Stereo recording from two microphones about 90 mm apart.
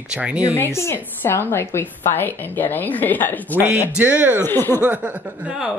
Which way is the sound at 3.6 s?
20° right (ahead or behind).